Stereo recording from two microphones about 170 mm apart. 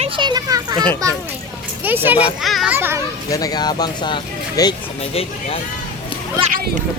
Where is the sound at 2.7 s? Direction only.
15° right (ahead or behind).